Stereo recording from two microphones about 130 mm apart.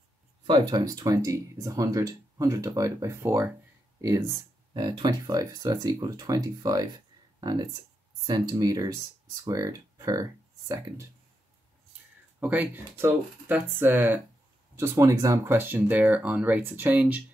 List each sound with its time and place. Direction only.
0.5 s speech: 30° right (ahead or behind)
4.7 s speech: 35° right (ahead or behind)
12.4 s speech: 15° right (ahead or behind)